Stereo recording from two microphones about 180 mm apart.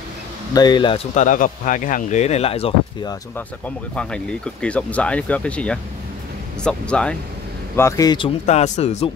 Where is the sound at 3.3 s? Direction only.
10° left (ahead or behind).